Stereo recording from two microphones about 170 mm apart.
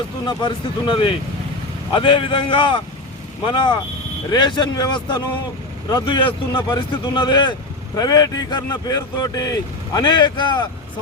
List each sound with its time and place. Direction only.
0.3 s a man's voice: 25° left (ahead or behind)